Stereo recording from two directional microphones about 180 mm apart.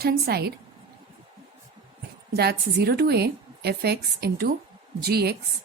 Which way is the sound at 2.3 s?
65° right (ahead or behind).